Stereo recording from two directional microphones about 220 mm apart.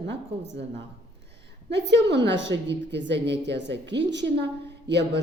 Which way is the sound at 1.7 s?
50° right (ahead or behind).